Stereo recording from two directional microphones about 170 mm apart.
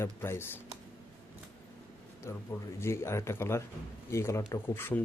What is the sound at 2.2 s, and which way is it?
Speech, 15° left (ahead or behind).